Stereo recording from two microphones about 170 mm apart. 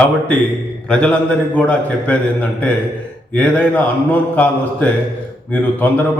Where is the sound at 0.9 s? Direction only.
5° left (ahead or behind).